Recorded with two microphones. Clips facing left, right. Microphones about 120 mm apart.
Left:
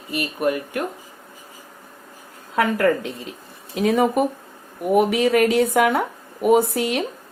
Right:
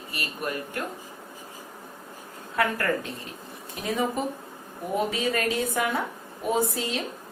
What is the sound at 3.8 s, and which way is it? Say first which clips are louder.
Speech: left 9 dB; 75° left (ahead or behind).